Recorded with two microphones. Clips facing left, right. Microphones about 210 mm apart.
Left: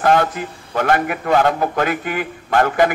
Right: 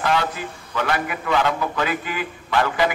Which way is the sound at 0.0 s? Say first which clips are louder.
Left 6 dB; 50° left (ahead or behind).